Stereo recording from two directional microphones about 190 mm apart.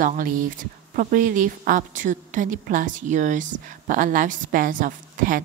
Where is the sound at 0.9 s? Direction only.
45° right (ahead or behind).